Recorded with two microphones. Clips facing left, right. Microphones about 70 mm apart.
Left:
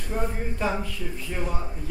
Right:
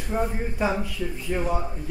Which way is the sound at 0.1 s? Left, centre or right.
Centre.